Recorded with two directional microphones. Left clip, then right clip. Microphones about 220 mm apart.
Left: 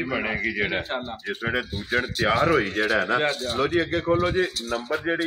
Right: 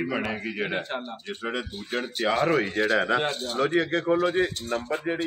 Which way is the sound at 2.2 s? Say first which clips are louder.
Left 1 dB; 30° left (ahead or behind).